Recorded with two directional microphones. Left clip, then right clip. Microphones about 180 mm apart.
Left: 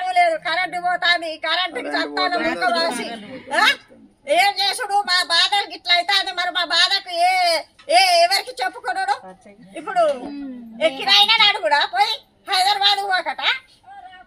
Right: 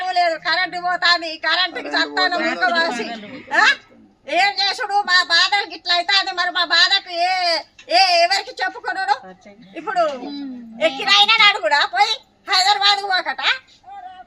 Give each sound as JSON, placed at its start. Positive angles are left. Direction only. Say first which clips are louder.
{"t": 0.0, "sound": "a woman's voice", "louder": "left 1 dB", "side_deg": 20}
{"t": 3.1, "sound": "a man's voice", "louder": "right 1 dB", "side_deg": 0}
{"t": 3.5, "sound": "a woman's voice", "louder": "right 2 dB", "side_deg": 25}
{"t": 10.8, "sound": "a woman's voice", "louder": "right 1 dB", "side_deg": 5}